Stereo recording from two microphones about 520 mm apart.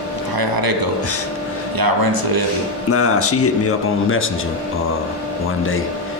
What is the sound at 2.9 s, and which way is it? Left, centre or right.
Speech, left.